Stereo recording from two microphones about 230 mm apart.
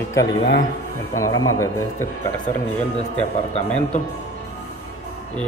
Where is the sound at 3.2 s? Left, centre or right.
Left.